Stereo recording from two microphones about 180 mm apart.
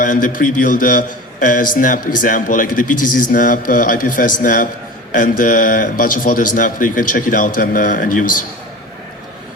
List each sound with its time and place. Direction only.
0.0 s a man's voice: 45° left (ahead or behind)